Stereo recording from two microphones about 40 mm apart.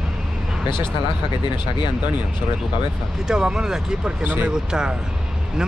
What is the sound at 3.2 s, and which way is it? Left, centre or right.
Speech, centre.